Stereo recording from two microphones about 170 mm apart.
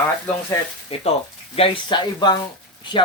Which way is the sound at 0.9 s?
35° left (ahead or behind).